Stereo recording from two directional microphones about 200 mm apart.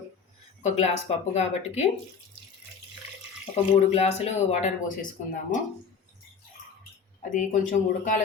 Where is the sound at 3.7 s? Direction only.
35° left (ahead or behind).